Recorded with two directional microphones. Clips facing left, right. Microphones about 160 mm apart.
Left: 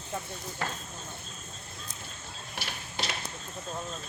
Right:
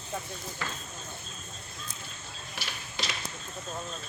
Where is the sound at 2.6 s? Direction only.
55° left (ahead or behind).